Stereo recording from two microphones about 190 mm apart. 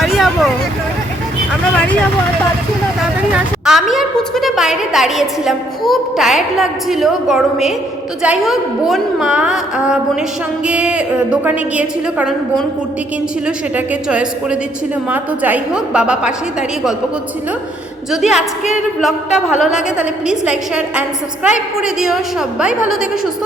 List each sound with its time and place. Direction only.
0.0 s vehicle: centre (ahead or behind)
1.7 s speech: 5° left (ahead or behind)
3.0 s a woman's voice: centre (ahead or behind)
13.7 s a woman's voice: 5° right (ahead or behind)
18.1 s a woman's voice: centre (ahead or behind)
18.3 s speech: 40° left (ahead or behind)
18.9 s a woman's voice: centre (ahead or behind)